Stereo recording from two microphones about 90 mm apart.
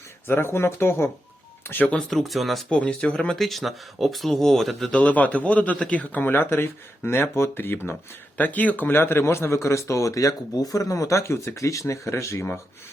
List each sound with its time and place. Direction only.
0.3 s a man's voice: 25° left (ahead or behind); by 2.6 s centre (ahead or behind)
2.6 s speech: 10° left (ahead or behind)
4.9 s a man's voice: 15° left (ahead or behind); by 12.5 s 30° left (ahead or behind)